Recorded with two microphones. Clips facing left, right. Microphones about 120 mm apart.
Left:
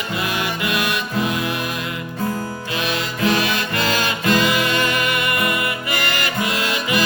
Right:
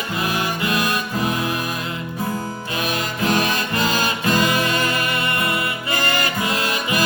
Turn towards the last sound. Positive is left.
turn(degrees=-25)  # may be behind; listen again after turning